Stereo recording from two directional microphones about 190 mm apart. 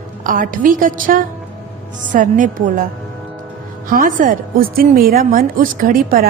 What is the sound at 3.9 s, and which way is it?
A woman's voice, 45° right (ahead or behind).